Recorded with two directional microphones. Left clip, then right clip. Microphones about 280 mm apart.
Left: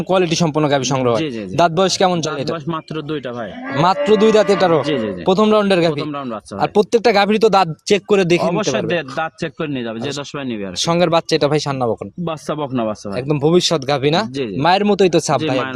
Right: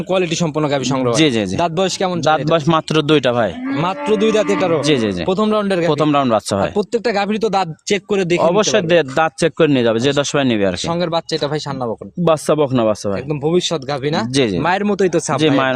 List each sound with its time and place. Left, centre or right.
0.1 s a man's voice: centre
1.2 s a man's voice: right
1.5 s speech: centre
2.3 s a man's voice: right
4.2 s speech: centre
4.9 s a man's voice: right
5.3 s speech: centre
5.9 s a man's voice: right
6.6 s speech: centre
8.4 s a man's voice: right
10.8 s speech: left
12.2 s speech: right
13.2 s speech: left